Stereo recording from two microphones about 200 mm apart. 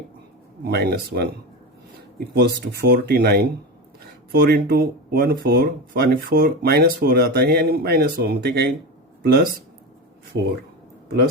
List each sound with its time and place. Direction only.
0.6 s speech: 50° right (ahead or behind)